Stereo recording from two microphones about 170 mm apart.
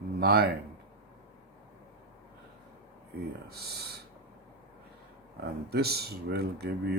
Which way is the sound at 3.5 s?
70° right (ahead or behind).